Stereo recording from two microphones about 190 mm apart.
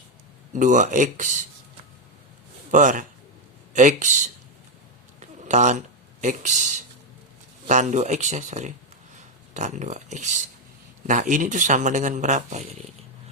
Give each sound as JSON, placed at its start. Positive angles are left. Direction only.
{"t": 0.5, "sound": "speech", "side_deg": -40}
{"t": 2.7, "sound": "a man's voice", "side_deg": -45}
{"t": 5.2, "sound": "a sound", "side_deg": -40}
{"t": 6.2, "sound": "speech", "side_deg": -40}